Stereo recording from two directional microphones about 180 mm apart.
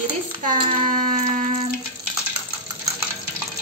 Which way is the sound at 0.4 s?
50° right (ahead or behind).